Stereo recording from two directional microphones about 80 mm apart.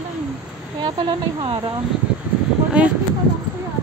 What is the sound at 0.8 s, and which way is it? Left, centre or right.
Speech, right.